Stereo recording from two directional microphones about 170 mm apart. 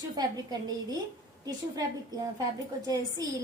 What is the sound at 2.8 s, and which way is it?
Speech, 20° right (ahead or behind).